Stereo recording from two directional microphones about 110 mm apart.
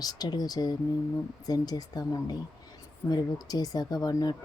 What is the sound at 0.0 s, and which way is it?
Speech, 35° left (ahead or behind).